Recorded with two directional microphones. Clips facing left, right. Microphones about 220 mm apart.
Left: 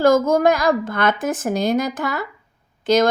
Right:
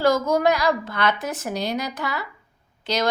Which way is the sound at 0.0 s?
50° left (ahead or behind).